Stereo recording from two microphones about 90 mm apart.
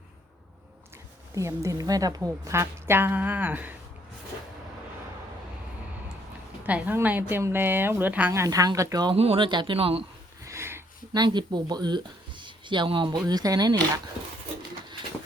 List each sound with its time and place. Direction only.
1.4 s a woman's voice: 35° right (ahead or behind)
6.7 s a woman's voice: 15° right (ahead or behind)
8.4 s speech: 40° right (ahead or behind)
9.1 s speech: 90° right
9.5 s speech: 60° right (ahead or behind); by 10.0 s 90° right
10.4 s sniff: 30° right (ahead or behind)
11.1 s speech: 50° right (ahead or behind)